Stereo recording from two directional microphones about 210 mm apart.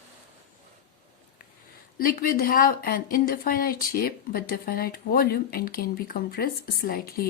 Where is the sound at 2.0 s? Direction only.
45° left (ahead or behind).